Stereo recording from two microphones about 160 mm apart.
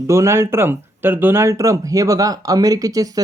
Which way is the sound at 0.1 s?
15° right (ahead or behind).